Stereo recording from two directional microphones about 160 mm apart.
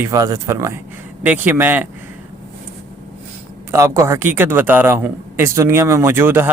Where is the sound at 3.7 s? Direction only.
15° right (ahead or behind).